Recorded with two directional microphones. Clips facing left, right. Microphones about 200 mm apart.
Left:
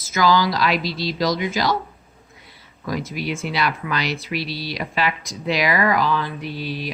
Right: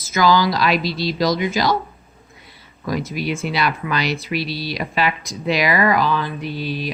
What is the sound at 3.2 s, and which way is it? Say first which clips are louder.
Speech: right 1 dB; 10° right (ahead or behind).